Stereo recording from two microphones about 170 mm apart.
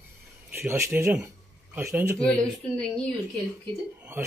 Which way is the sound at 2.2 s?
5° left (ahead or behind).